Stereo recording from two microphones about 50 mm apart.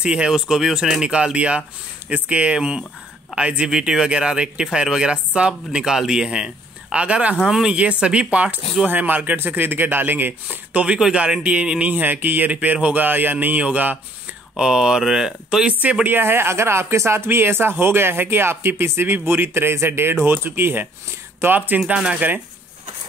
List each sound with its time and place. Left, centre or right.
0.0 s a man's voice: centre
7.7 s a man's voice: right
10.7 s a man's voice: right
11.9 s speech: right
14.6 s speech: centre
15.8 s a man's voice: right
16.1 s speech: right
21.9 s a man's voice: right